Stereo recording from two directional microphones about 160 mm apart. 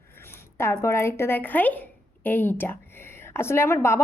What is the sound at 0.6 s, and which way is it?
A woman's voice, 15° left (ahead or behind).